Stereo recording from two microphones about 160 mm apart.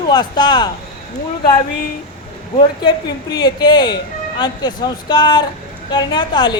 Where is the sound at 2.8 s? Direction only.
25° left (ahead or behind).